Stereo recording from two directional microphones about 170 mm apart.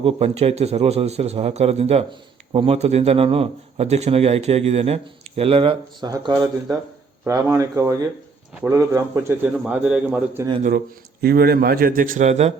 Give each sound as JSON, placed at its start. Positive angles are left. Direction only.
{"t": 0.0, "sound": "a man's voice", "side_deg": -35}
{"t": 11.2, "sound": "a man's voice", "side_deg": -65}